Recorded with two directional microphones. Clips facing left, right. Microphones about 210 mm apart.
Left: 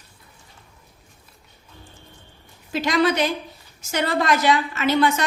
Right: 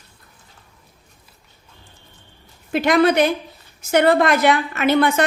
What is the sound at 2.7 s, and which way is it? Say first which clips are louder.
A woman's voice: right 5 dB; 55° right (ahead or behind).